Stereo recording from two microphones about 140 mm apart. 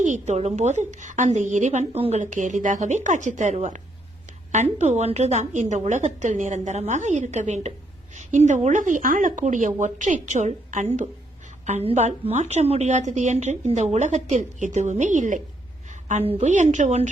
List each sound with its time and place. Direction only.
0.0 s a woman's voice: 55° right (ahead or behind)
2.2 s a woman's voice: 60° right (ahead or behind)
15.9 s a sound: 60° right (ahead or behind)
16.2 s a woman's voice: 55° right (ahead or behind)